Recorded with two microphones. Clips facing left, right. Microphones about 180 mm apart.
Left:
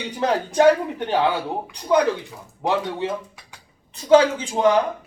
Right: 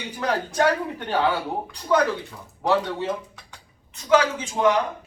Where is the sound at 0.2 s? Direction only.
25° left (ahead or behind).